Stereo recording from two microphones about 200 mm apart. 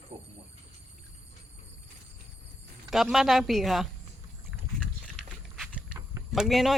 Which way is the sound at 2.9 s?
Centre (ahead or behind).